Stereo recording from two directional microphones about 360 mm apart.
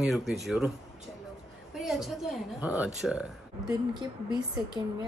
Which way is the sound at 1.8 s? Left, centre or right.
Centre.